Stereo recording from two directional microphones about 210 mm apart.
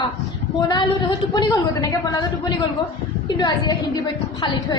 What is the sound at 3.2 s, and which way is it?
Speech, 20° left (ahead or behind).